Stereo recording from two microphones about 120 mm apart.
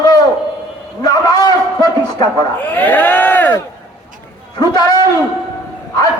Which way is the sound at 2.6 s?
15° left (ahead or behind).